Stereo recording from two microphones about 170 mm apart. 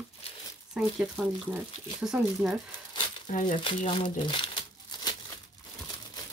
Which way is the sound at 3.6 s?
30° left (ahead or behind).